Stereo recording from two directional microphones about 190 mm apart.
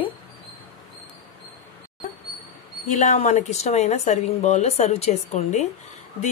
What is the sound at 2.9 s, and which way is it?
Speech, 40° left (ahead or behind).